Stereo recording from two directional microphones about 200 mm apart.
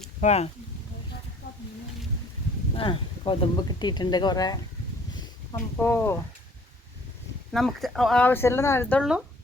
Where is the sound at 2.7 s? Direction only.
25° left (ahead or behind).